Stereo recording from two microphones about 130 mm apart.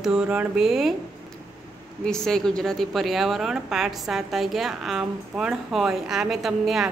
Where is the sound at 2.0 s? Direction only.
5° left (ahead or behind).